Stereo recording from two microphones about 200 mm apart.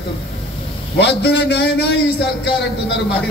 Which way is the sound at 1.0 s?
60° left (ahead or behind).